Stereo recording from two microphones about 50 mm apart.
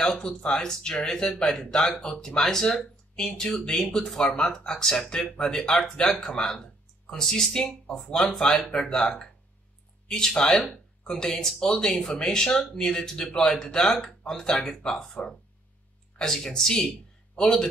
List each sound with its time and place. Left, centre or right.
0.0 s speech: centre
8.8 s speech: centre